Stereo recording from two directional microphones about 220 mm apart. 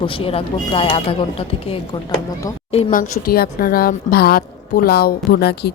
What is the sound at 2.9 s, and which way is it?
A woman's voice, 40° left (ahead or behind).